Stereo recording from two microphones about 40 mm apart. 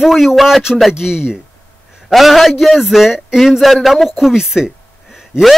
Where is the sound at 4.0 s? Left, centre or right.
Centre.